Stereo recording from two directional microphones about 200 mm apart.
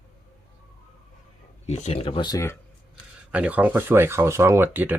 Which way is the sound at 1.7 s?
30° left (ahead or behind).